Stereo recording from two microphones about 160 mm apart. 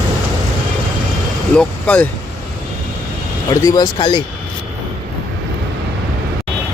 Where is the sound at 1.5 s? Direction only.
10° left (ahead or behind).